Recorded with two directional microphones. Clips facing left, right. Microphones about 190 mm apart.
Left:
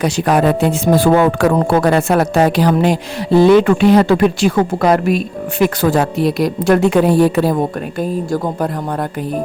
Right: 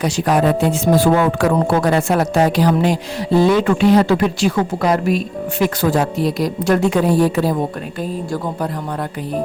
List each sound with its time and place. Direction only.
0.0 s speech: 60° left (ahead or behind)
7.9 s a woman's voice: 50° left (ahead or behind)